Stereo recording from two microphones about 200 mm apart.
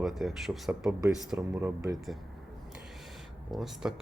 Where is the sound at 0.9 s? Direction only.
15° right (ahead or behind).